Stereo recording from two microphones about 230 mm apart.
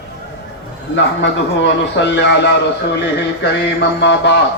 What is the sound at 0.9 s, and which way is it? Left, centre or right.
A man's voice, left.